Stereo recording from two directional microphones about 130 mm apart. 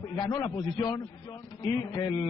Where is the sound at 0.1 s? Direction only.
30° left (ahead or behind).